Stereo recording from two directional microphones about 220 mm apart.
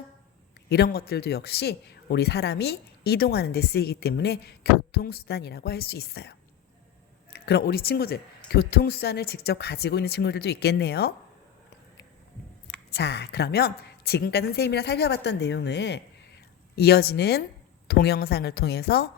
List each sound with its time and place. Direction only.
0.7 s speech: 45° left (ahead or behind)
7.3 s speech: 45° left (ahead or behind)
12.9 s speech: 50° left (ahead or behind)